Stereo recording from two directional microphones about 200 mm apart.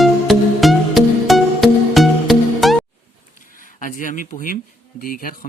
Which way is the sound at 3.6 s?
40° left (ahead or behind).